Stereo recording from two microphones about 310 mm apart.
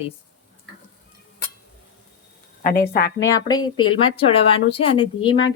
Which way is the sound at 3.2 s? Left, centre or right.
Centre.